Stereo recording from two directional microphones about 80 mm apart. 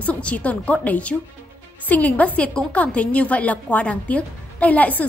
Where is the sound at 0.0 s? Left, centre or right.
Centre.